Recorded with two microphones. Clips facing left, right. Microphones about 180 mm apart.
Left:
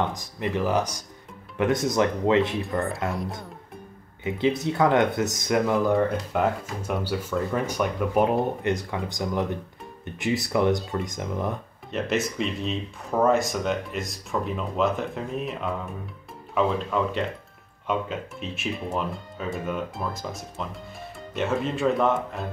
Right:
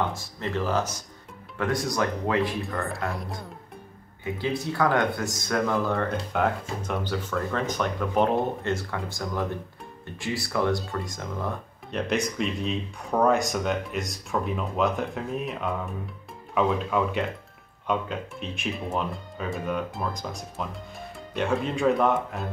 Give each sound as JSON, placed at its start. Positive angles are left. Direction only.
{"t": 0.1, "sound": "speech", "side_deg": 15}
{"t": 4.2, "sound": "speech", "side_deg": 20}
{"t": 6.3, "sound": "speech", "side_deg": 5}
{"t": 11.9, "sound": "speech", "side_deg": 0}